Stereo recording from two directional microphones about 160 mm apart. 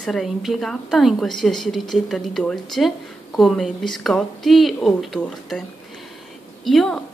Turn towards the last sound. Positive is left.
turn(degrees=5)  # may be behind; listen again after turning